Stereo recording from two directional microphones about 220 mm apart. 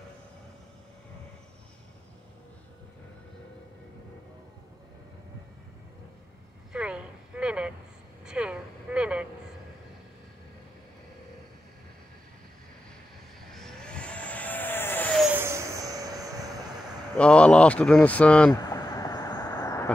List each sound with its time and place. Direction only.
6.7 s a sound: 5° right (ahead or behind)
8.3 s vehicle: 5° right (ahead or behind)
13.5 s vehicle: centre (ahead or behind)
15.3 s vehicle: 10° right (ahead or behind)
17.2 s speech: 5° left (ahead or behind)
18.5 s vehicle: 15° left (ahead or behind)